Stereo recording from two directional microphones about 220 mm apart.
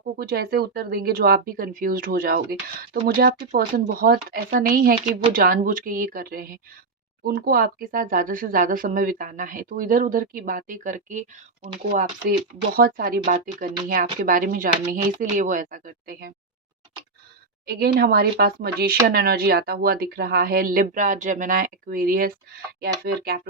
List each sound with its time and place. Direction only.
0.2 s speech: 45° right (ahead or behind)
17.7 s speech: 45° right (ahead or behind)